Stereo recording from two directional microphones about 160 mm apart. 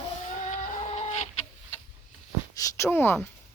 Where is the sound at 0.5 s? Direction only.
45° left (ahead or behind).